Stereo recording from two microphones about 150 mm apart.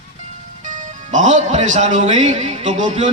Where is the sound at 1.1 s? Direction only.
55° right (ahead or behind).